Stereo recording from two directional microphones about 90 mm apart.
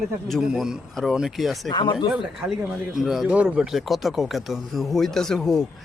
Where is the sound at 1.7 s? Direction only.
60° left (ahead or behind).